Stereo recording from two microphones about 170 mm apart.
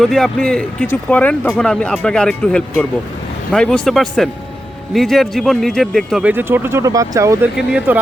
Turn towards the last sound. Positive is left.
turn(degrees=-5)  # may be behind; listen again after turning